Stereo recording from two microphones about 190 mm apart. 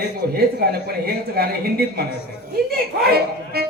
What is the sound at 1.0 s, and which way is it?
A woman's voice, 55° right (ahead or behind).